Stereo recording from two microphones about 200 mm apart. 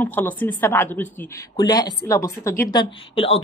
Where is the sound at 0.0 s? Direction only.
10° left (ahead or behind).